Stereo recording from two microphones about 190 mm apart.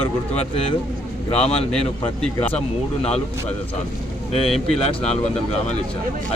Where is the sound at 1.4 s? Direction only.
35° left (ahead or behind).